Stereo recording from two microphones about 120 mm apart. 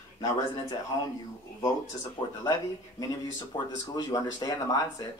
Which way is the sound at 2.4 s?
30° left (ahead or behind).